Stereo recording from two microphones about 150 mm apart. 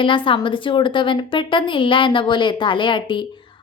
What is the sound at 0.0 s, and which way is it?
A woman's voice, 35° left (ahead or behind).